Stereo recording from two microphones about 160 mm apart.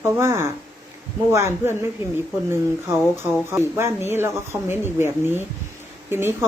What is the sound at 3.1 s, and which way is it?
A woman's voice, 15° right (ahead or behind).